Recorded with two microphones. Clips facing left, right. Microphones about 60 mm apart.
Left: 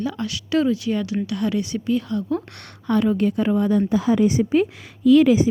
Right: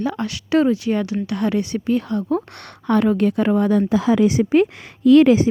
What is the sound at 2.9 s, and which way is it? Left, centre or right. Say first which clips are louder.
Speech: right 2 dB; right.